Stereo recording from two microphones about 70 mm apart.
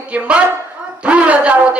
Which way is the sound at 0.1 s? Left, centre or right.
Centre.